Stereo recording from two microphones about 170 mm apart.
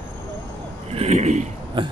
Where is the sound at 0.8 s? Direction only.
40° right (ahead or behind).